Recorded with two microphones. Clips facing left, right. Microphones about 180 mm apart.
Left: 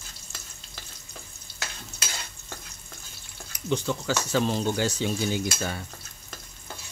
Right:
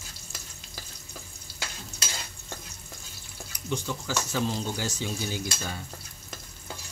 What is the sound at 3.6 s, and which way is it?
Speech, 70° left (ahead or behind).